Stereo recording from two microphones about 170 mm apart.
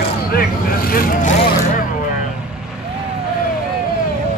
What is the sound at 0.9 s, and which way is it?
Speech, 55° left (ahead or behind).